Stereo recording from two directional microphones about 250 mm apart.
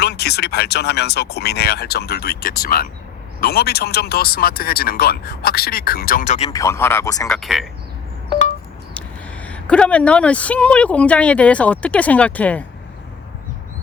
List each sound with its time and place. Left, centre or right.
0.0 s speech: left
6.5 s speech: centre
7.3 s speech: centre
9.0 s speech: centre